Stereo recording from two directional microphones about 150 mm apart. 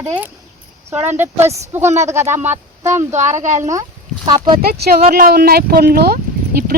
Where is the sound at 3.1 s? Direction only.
55° right (ahead or behind).